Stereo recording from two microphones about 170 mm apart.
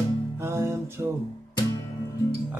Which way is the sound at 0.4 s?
15° right (ahead or behind).